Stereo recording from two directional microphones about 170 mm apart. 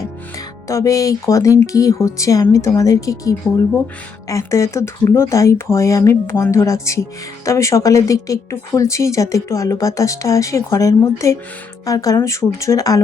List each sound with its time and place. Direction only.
0.3 s a woman's voice: 20° left (ahead or behind)